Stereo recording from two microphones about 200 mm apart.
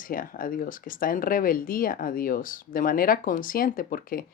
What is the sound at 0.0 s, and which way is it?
Speech, 45° left (ahead or behind).